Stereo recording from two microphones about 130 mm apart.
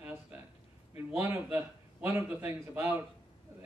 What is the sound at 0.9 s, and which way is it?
A man's voice, 15° right (ahead or behind).